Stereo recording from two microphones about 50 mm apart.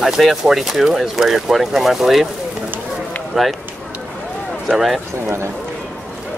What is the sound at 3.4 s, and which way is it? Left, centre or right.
Speech, centre.